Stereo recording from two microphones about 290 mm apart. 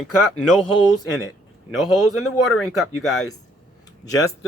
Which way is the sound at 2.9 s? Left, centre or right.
Left.